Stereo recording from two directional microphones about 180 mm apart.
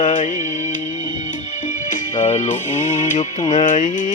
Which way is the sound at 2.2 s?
40° left (ahead or behind).